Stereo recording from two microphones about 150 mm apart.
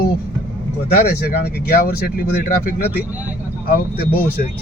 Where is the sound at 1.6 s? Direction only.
90° left.